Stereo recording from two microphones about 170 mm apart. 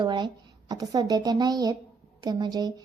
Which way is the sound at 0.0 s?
25° right (ahead or behind).